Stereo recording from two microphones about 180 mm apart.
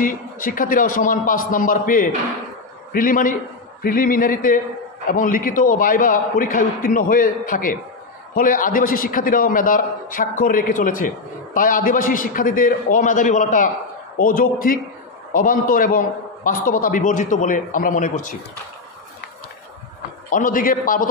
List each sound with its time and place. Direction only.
0.0 s a man's voice: 50° left (ahead or behind)
20.2 s a man's voice: 45° left (ahead or behind)